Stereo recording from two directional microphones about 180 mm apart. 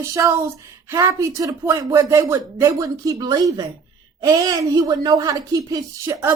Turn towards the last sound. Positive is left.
turn(degrees=-15)  # may be behind; listen again after turning